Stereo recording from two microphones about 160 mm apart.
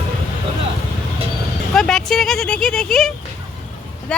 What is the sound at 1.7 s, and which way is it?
Vehicle, 5° left (ahead or behind).